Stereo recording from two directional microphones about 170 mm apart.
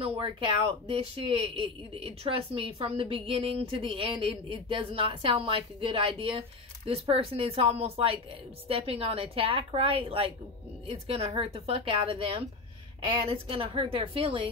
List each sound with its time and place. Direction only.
0.0 s speech: 30° right (ahead or behind)